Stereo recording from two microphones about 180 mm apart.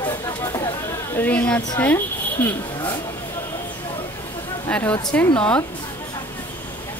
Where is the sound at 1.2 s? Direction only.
5° left (ahead or behind).